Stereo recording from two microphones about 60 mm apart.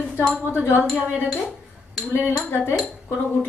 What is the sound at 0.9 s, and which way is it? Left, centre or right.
Speech, right.